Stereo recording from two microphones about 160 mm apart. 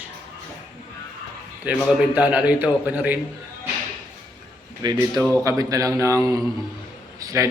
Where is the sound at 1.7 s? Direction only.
10° right (ahead or behind).